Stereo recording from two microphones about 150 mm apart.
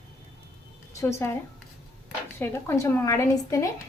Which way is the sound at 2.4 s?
20° left (ahead or behind).